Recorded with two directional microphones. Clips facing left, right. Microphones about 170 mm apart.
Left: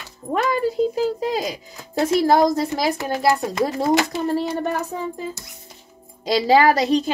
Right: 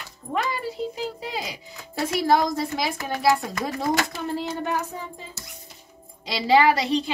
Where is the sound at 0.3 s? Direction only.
45° left (ahead or behind).